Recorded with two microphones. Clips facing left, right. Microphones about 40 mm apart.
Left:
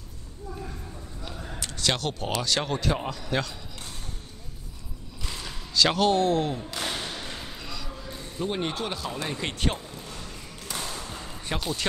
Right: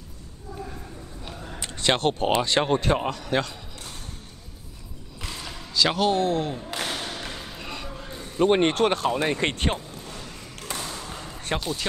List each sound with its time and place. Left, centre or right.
1.6 s speech: right
3.3 s speech: right
5.3 s a sound: centre
6.7 s a sound: right
7.2 s basketball bounce: right
8.4 s speech: right
9.1 s speech: right
10.7 s a sound: right
11.5 s speech: centre